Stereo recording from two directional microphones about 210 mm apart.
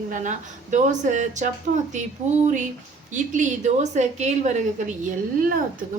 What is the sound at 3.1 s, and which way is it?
A woman's voice, 35° right (ahead or behind).